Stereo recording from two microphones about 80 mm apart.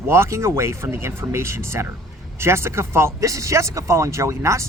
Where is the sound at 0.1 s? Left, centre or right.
Right.